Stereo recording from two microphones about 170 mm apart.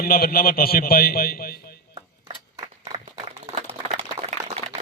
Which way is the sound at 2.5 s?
20° right (ahead or behind).